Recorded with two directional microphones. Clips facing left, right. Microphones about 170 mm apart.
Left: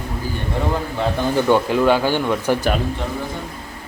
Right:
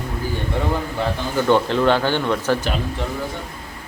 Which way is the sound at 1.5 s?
10° left (ahead or behind).